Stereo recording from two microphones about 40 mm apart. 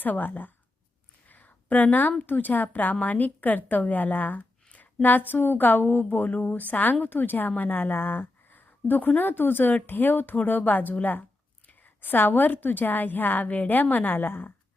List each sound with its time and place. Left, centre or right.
0.0 s a woman's voice: left
1.3 s a sound: left
2.2 s a woman's voice: left
6.2 s a woman's voice: left